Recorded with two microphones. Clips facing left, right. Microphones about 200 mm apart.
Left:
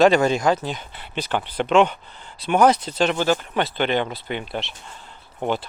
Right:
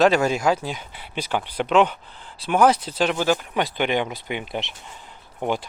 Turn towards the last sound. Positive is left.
turn(degrees=-10)  # may be behind; listen again after turning